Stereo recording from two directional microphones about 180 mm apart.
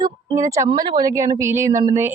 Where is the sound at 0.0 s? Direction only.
20° right (ahead or behind).